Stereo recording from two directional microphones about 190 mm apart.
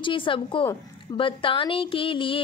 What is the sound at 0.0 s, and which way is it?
Speech, 25° left (ahead or behind).